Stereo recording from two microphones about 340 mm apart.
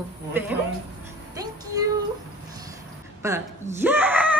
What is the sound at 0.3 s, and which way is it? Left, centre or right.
Speech, centre.